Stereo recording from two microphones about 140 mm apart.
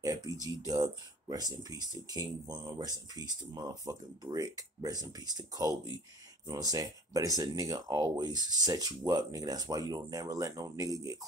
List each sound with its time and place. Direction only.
0.0 s speech: 25° right (ahead or behind)